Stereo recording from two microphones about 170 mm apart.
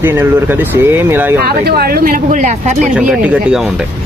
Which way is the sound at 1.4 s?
65° right (ahead or behind).